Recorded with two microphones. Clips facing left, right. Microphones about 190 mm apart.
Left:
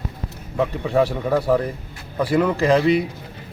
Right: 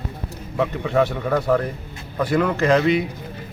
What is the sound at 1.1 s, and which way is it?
A man's voice, 10° left (ahead or behind).